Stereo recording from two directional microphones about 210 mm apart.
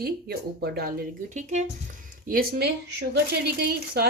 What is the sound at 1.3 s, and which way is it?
Speech, 35° right (ahead or behind).